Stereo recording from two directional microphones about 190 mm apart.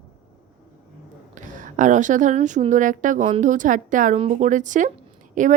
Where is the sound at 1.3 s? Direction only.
45° right (ahead or behind).